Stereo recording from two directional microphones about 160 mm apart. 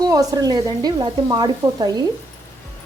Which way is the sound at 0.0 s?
20° right (ahead or behind).